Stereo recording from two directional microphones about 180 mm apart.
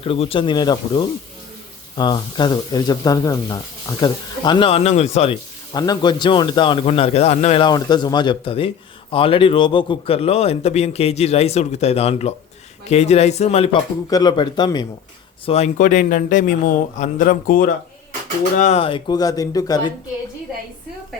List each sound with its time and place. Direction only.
0.0 s speech: 30° left (ahead or behind)
5.7 s speech: 20° left (ahead or behind)
7.6 s a man's voice: 25° left (ahead or behind)
14.1 s speech: 20° left (ahead or behind)
15.4 s speech: 35° left (ahead or behind)
18.6 s speech: 35° left (ahead or behind)